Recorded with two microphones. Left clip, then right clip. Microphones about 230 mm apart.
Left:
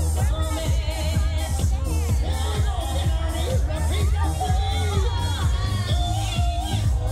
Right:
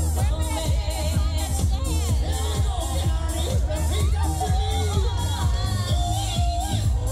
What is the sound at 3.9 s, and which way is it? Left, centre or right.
Music, right.